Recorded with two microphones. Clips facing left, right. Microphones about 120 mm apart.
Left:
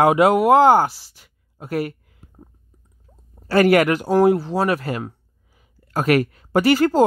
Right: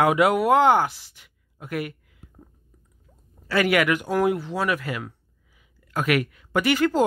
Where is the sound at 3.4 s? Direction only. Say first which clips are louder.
Left 6 dB; 40° left (ahead or behind).